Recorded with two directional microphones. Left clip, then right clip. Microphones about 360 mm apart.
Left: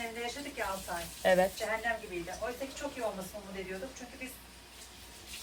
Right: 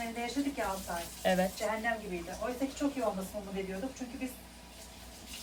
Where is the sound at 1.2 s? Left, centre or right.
Centre.